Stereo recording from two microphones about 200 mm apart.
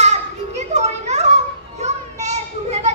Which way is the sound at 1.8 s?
35° right (ahead or behind).